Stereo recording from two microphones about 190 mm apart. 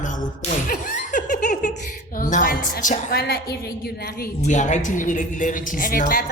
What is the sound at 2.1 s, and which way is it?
A woman's voice, 45° left (ahead or behind).